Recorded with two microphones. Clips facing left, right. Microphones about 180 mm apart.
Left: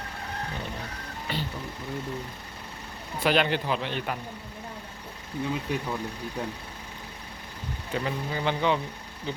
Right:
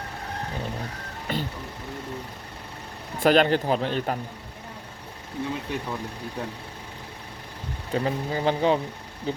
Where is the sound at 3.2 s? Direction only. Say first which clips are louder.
Right 5 dB; 45° right (ahead or behind).